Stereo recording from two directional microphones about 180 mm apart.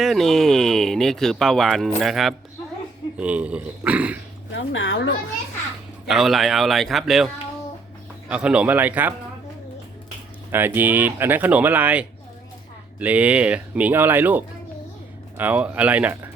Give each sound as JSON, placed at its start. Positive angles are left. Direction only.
{"t": 0.0, "sound": "speech", "side_deg": 0}
{"t": 4.5, "sound": "speech", "side_deg": 90}
{"t": 6.1, "sound": "speech", "side_deg": 0}
{"t": 8.3, "sound": "speech", "side_deg": -5}
{"t": 10.5, "sound": "speech", "side_deg": -10}